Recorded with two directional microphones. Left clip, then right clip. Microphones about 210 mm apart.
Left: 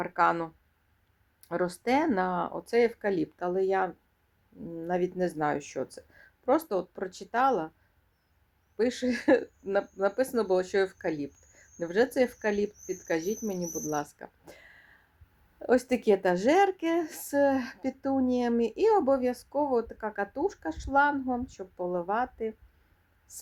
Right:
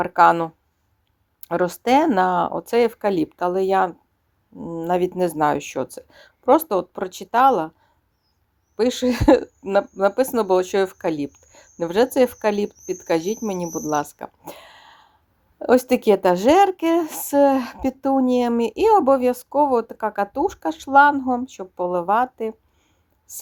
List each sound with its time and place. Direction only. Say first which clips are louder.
0.0 s speech: right 11 dB; 40° right (ahead or behind)
8.7 s speech: right 8 dB; 45° right (ahead or behind)